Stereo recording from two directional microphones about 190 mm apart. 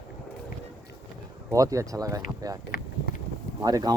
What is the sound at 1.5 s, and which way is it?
Speech, 15° right (ahead or behind).